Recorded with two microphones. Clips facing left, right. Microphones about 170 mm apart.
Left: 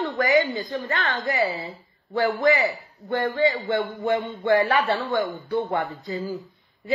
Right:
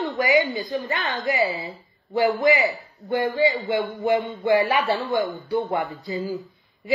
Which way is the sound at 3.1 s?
20° right (ahead or behind).